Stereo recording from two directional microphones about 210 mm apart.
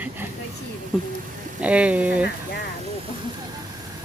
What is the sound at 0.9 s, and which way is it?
A woman's voice, centre (ahead or behind).